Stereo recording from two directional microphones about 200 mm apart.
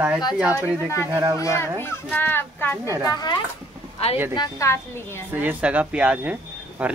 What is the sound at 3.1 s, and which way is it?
Speech, 20° left (ahead or behind).